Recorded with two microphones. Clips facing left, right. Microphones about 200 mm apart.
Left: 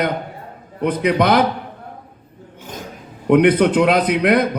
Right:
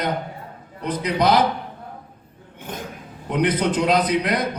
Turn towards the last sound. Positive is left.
turn(degrees=60)  # may be behind; listen again after turning